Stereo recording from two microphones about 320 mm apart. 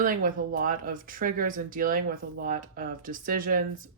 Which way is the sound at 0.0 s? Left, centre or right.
Right.